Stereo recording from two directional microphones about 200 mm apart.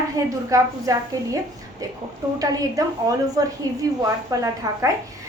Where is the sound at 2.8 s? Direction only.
15° right (ahead or behind).